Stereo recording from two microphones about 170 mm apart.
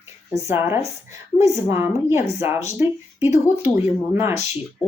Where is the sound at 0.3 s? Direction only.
15° right (ahead or behind).